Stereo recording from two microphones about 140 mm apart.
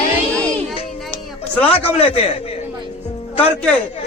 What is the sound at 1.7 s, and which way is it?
Speech, 45° left (ahead or behind).